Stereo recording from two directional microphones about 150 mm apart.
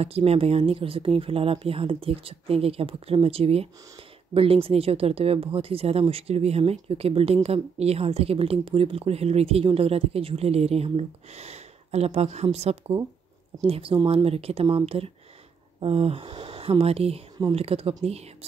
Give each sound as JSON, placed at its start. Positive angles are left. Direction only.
{"t": 0.0, "sound": "a woman's voice", "side_deg": -40}
{"t": 15.8, "sound": "speech", "side_deg": -40}